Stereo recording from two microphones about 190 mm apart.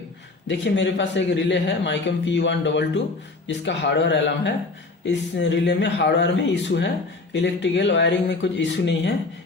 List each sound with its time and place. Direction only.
0.4 s a man's voice: 70° left (ahead or behind)